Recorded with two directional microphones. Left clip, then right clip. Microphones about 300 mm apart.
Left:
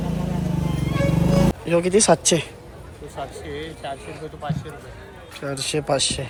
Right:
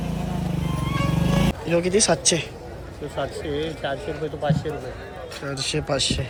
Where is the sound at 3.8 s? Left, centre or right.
Right.